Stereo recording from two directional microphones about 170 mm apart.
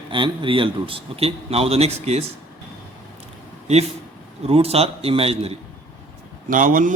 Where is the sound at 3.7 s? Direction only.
40° right (ahead or behind).